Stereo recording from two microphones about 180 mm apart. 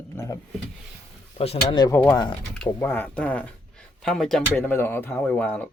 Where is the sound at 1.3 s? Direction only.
35° left (ahead or behind).